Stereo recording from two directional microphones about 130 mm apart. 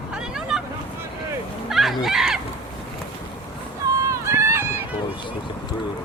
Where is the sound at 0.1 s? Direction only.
5° right (ahead or behind).